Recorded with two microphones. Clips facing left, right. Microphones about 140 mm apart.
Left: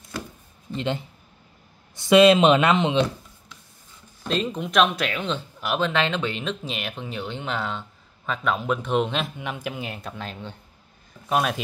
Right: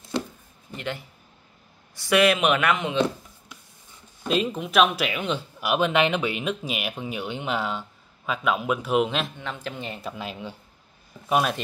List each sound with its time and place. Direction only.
0.7 s speech: 25° left (ahead or behind)
4.2 s speech: 5° right (ahead or behind)
9.4 s speech: 15° left (ahead or behind)